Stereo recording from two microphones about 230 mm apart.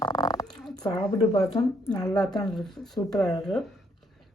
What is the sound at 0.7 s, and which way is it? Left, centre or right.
Speech, centre.